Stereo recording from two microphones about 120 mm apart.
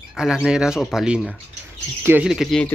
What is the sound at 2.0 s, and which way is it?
Speech, 15° right (ahead or behind).